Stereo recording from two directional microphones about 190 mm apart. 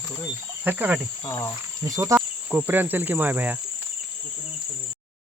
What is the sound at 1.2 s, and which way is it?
Speech, 20° left (ahead or behind).